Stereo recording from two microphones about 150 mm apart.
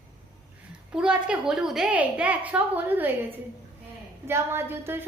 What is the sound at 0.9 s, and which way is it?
A woman's voice, 5° right (ahead or behind).